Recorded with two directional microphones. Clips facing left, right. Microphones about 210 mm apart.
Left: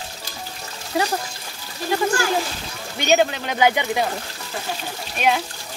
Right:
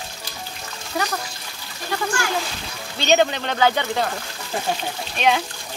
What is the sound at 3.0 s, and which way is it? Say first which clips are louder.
Speech: even; 5° left (ahead or behind).